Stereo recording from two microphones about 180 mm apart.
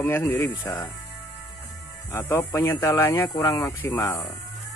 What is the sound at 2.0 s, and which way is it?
Speech, 15° left (ahead or behind).